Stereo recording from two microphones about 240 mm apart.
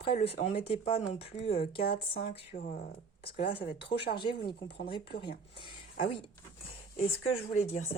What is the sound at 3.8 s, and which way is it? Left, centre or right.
Speech, left.